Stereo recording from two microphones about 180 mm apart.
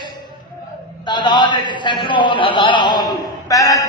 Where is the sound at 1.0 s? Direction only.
25° left (ahead or behind).